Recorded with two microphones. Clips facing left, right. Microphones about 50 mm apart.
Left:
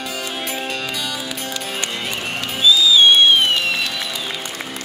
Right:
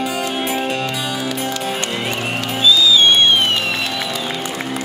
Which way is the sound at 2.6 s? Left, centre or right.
Centre.